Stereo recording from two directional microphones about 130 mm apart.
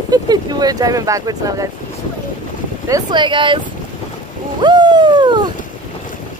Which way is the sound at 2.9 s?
35° right (ahead or behind).